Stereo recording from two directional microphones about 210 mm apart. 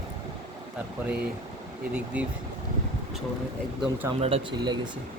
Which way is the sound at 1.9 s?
5° right (ahead or behind).